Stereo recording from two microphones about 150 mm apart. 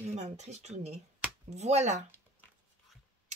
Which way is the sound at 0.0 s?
50° right (ahead or behind).